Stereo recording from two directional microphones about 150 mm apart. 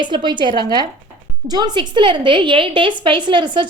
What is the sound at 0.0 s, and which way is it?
A woman's voice, 30° right (ahead or behind).